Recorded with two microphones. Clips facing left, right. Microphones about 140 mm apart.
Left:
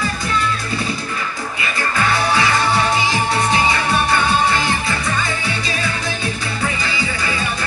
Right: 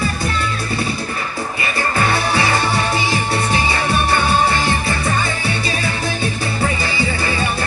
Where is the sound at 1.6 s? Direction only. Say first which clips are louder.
Right 1 dB; 35° right (ahead or behind).